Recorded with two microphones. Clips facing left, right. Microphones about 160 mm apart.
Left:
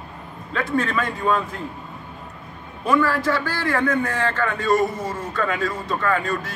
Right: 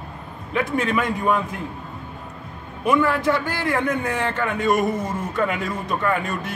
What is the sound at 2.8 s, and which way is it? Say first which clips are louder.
A man's voice: right 1 dB; 20° right (ahead or behind).